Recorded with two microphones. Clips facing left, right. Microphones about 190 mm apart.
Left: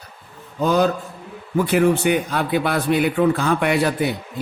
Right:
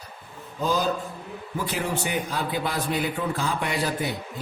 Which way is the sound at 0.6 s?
65° left (ahead or behind).